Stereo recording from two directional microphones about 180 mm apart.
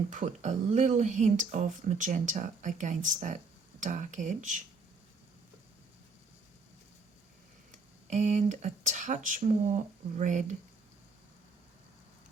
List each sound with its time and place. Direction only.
0.1 s speech: 45° right (ahead or behind)
7.7 s speech: 40° right (ahead or behind)